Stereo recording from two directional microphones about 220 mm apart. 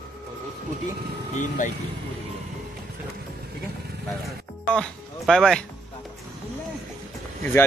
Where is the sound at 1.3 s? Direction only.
35° left (ahead or behind).